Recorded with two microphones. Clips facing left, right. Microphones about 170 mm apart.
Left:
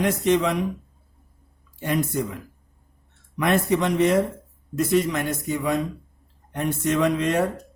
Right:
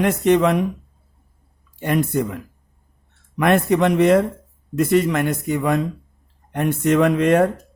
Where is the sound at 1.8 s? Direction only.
60° right (ahead or behind).